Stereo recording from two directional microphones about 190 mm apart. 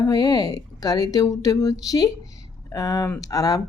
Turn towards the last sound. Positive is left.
turn(degrees=20)  # may be behind; listen again after turning